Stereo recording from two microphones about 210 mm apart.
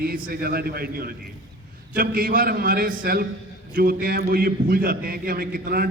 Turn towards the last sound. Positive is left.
turn(degrees=-45)  # may be behind; listen again after turning